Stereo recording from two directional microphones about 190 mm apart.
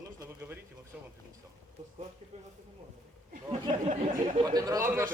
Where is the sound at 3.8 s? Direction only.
40° right (ahead or behind).